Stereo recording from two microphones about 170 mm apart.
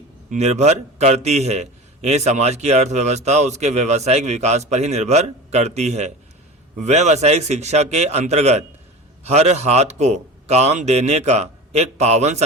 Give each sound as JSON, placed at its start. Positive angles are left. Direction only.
{"t": 0.3, "sound": "a man's voice", "side_deg": -40}